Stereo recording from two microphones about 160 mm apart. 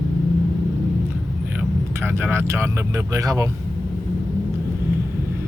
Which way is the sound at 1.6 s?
15° right (ahead or behind).